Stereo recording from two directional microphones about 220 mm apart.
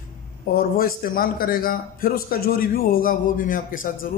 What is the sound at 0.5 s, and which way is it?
A man's voice, 40° left (ahead or behind).